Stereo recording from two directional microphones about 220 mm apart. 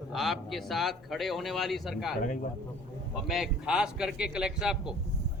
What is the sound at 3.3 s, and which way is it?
Speech, centre (ahead or behind).